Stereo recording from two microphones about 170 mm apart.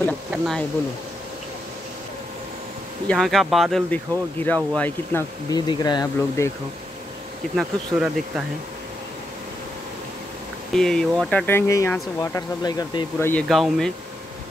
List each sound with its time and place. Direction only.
0.3 s speech: centre (ahead or behind)
3.1 s speech: centre (ahead or behind)
5.5 s speech: 25° left (ahead or behind)
7.5 s speech: 5° right (ahead or behind)
10.7 s speech: 5° left (ahead or behind); by 13.3 s 20° left (ahead or behind)
13.3 s speech: 5° left (ahead or behind)